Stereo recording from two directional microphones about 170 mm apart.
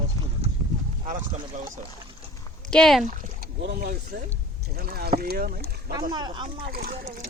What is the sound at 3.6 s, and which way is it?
Speech, 60° right (ahead or behind).